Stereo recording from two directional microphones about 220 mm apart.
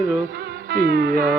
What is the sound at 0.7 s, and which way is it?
Music, 45° right (ahead or behind).